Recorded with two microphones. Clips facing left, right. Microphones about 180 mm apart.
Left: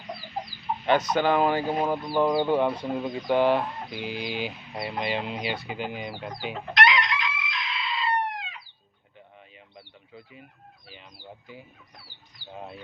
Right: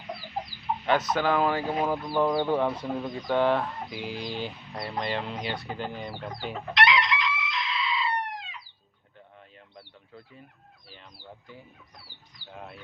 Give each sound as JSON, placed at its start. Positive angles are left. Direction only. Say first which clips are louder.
{"t": 0.9, "sound": "speech", "louder": "left 3 dB", "side_deg": 0}
{"t": 6.7, "sound": "chicken", "louder": "even", "side_deg": 45}
{"t": 9.7, "sound": "a sound", "louder": "left 1 dB", "side_deg": 0}
{"t": 10.9, "sound": "fowl", "louder": "left 1 dB", "side_deg": 10}
{"t": 12.5, "sound": "bird", "louder": "left 3 dB", "side_deg": 20}